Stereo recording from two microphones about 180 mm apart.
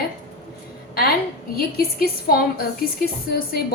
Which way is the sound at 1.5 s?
55° left (ahead or behind).